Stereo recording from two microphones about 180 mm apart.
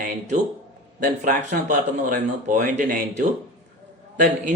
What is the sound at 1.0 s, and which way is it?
Speech, 50° right (ahead or behind).